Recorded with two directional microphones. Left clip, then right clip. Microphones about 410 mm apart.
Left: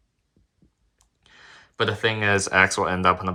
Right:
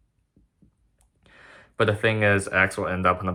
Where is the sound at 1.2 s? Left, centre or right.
Centre.